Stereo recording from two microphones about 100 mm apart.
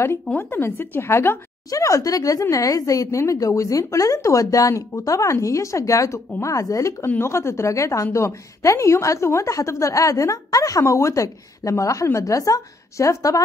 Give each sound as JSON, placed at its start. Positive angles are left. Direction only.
{"t": 0.4, "sound": "a woman's voice", "side_deg": 20}